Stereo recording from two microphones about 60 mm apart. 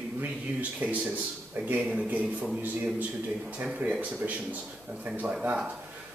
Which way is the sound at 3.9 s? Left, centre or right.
Right.